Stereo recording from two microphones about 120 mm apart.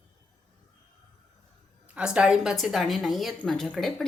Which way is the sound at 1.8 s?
10° right (ahead or behind).